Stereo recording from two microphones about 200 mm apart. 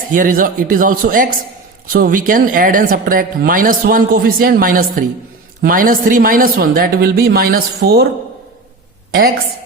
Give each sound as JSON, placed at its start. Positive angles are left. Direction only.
{"t": 0.1, "sound": "speech", "side_deg": -45}